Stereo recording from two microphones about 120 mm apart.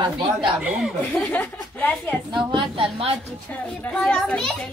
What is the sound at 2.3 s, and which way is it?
Speech, 40° right (ahead or behind).